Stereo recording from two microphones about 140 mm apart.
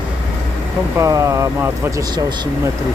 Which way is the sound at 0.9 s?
20° right (ahead or behind).